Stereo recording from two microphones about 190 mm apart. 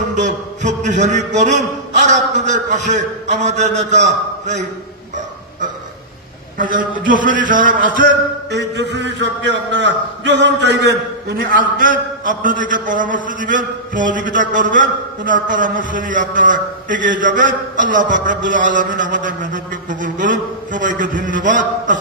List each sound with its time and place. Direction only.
0.1 s a man's voice: 40° right (ahead or behind)
7.1 s a man's voice: 45° right (ahead or behind)
8.5 s a man's voice: 65° right (ahead or behind); by 21.9 s 45° right (ahead or behind)